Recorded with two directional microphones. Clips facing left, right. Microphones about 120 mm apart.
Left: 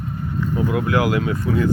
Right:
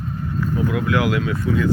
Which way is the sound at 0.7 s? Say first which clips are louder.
Left 2 dB; 30° left (ahead or behind).